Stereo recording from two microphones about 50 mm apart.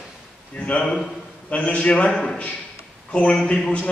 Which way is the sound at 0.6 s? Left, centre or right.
Left.